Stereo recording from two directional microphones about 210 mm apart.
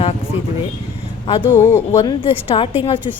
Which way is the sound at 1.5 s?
10° left (ahead or behind).